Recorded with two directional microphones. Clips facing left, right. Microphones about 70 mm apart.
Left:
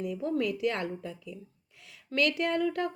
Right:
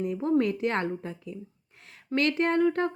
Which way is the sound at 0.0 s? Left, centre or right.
Right.